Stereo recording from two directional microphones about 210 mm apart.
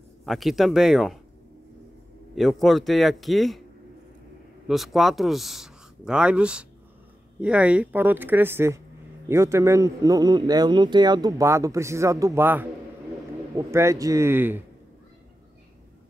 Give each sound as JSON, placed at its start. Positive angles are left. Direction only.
{"t": 0.2, "sound": "a man's voice", "side_deg": 0}
{"t": 2.3, "sound": "a man's voice", "side_deg": 0}
{"t": 4.6, "sound": "a man's voice", "side_deg": 0}